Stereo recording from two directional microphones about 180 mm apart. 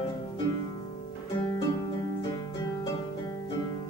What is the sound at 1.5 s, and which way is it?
Music, 20° left (ahead or behind).